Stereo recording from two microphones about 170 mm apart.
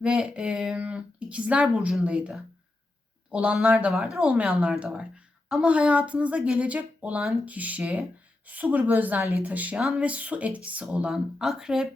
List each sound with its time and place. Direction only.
0.0 s speech: 5° right (ahead or behind)